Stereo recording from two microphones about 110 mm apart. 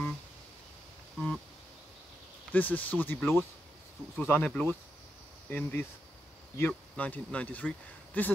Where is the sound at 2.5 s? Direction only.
15° left (ahead or behind).